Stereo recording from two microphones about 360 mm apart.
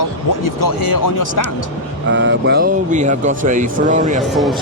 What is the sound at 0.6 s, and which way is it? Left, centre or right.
Speech, left.